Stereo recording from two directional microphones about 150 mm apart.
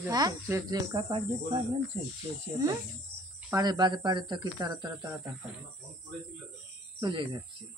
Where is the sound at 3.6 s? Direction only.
30° right (ahead or behind).